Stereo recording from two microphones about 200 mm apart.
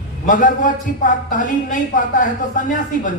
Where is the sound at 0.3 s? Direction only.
40° left (ahead or behind).